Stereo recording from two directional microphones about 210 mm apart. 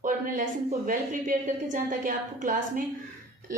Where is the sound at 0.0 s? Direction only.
40° right (ahead or behind).